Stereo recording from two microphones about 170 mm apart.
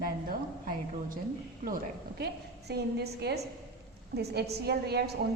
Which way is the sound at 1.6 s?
65° right (ahead or behind).